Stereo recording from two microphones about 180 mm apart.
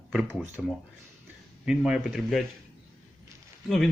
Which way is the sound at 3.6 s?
Centre (ahead or behind).